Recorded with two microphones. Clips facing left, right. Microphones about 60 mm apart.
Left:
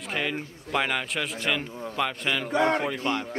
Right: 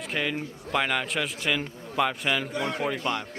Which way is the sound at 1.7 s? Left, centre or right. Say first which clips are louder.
Left 6 dB; left.